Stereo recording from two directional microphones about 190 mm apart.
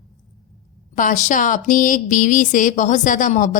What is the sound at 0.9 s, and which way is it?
Speech, 40° left (ahead or behind).